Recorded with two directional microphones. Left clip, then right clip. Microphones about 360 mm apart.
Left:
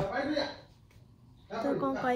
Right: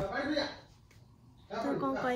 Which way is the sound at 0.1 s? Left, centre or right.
Left.